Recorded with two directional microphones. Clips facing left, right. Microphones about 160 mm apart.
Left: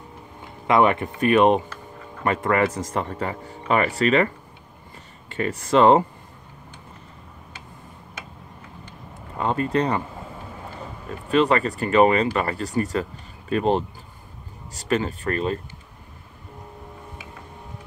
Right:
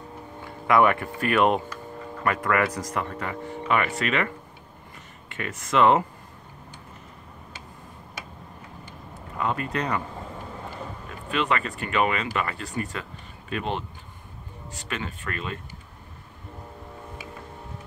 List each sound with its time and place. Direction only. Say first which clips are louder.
0.4 s speech: left 2 dB; 20° left (ahead or behind)
5.3 s speech: left 6 dB; 35° left (ahead or behind)
9.4 s speech: left 5 dB; 30° left (ahead or behind)
11.1 s speech: left 7 dB; 35° left (ahead or behind)